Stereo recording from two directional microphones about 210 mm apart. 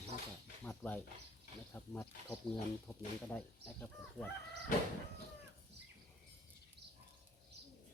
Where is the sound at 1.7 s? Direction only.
10° left (ahead or behind).